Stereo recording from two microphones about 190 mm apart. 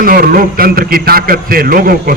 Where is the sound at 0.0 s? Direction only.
50° right (ahead or behind).